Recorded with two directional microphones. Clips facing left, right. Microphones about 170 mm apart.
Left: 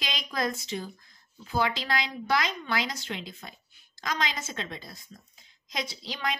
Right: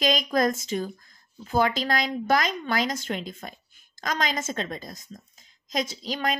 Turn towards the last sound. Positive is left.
turn(degrees=-45)  # may be behind; listen again after turning